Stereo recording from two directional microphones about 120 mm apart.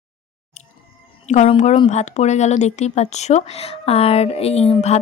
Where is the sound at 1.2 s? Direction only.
75° left (ahead or behind).